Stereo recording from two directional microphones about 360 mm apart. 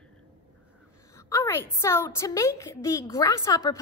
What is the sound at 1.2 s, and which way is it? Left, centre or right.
A woman's voice, centre.